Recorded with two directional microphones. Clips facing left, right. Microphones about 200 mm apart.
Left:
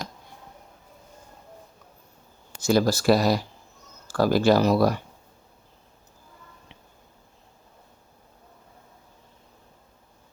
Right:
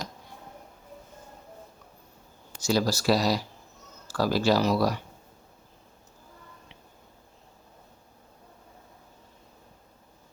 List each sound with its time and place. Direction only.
2.6 s speech: 55° left (ahead or behind)